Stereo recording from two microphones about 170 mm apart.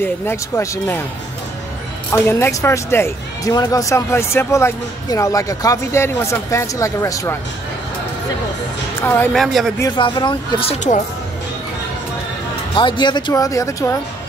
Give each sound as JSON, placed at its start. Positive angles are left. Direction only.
{"t": 0.0, "sound": "speech", "side_deg": 15}
{"t": 2.0, "sound": "speech", "side_deg": 15}
{"t": 9.0, "sound": "speech", "side_deg": 10}
{"t": 9.4, "sound": "speech", "side_deg": 0}
{"t": 9.8, "sound": "speech", "side_deg": 25}
{"t": 12.7, "sound": "speech", "side_deg": 25}